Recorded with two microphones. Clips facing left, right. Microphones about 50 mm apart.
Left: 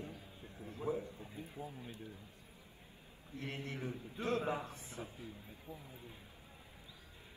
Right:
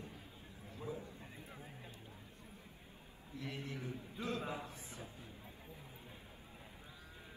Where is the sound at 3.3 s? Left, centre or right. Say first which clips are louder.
Left 2 dB; left.